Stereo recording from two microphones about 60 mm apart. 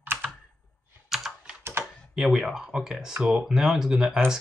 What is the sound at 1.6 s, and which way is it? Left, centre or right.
Typing, right.